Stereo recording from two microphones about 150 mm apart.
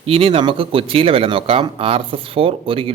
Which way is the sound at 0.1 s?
40° right (ahead or behind).